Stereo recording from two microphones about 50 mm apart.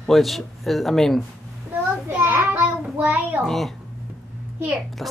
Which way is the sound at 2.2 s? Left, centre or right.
Right.